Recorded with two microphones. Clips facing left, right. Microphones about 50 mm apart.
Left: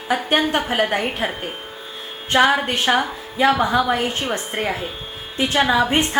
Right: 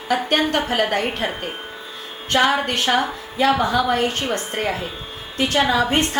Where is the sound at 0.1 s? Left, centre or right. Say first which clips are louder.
Even; centre.